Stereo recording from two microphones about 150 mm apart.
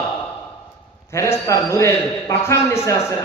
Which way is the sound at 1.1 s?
20° left (ahead or behind).